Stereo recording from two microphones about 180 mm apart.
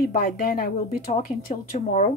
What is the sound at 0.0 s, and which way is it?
Speech, 55° left (ahead or behind).